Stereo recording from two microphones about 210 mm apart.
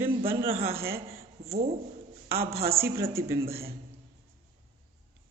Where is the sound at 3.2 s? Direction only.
15° right (ahead or behind).